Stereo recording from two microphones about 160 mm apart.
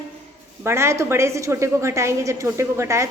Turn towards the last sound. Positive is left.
turn(degrees=-20)  # may be behind; listen again after turning